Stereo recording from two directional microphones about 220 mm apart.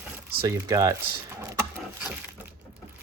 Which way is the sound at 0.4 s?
15° right (ahead or behind).